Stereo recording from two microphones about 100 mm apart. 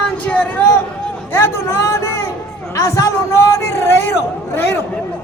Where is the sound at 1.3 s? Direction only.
25° left (ahead or behind).